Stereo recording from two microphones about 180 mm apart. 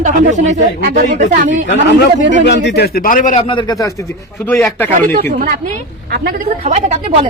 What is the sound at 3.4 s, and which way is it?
A man's voice, 25° left (ahead or behind).